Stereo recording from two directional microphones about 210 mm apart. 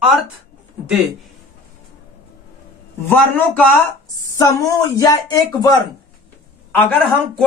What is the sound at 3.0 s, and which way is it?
Speech, 5° left (ahead or behind).